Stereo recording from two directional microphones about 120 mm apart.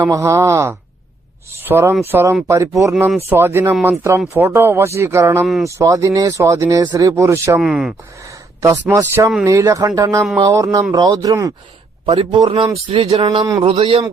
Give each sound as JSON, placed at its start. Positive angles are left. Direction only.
{"t": 0.0, "sound": "speech", "side_deg": -25}
{"t": 7.6, "sound": "speech", "side_deg": -5}
{"t": 8.3, "sound": "a man's voice", "side_deg": -25}
{"t": 12.0, "sound": "a sound", "side_deg": -50}